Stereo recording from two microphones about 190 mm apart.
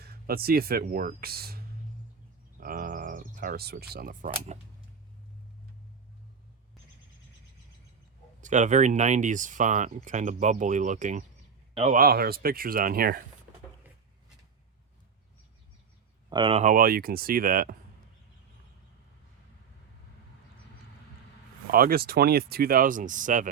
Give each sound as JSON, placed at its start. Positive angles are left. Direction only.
{"t": 0.0, "sound": "speech", "side_deg": -55}
{"t": 8.4, "sound": "speech", "side_deg": -40}
{"t": 11.9, "sound": "speech", "side_deg": -50}
{"t": 16.3, "sound": "speech", "side_deg": -30}
{"t": 21.7, "sound": "speech", "side_deg": -50}